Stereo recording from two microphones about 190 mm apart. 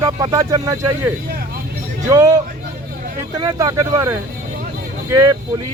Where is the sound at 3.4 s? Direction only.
20° right (ahead or behind).